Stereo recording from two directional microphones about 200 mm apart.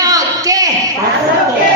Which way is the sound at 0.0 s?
20° right (ahead or behind).